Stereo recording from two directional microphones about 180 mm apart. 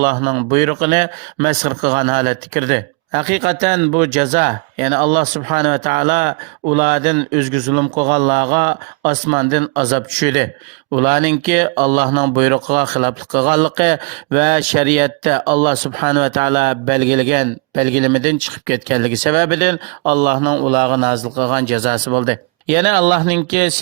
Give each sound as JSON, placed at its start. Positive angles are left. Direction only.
{"t": 0.0, "sound": "speech", "side_deg": -45}